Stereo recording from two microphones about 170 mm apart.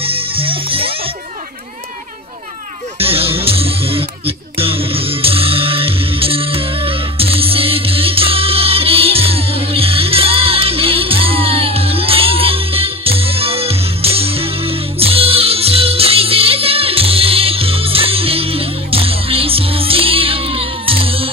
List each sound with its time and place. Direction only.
0.0 s music: 35° right (ahead or behind)
3.0 s music: 35° right (ahead or behind)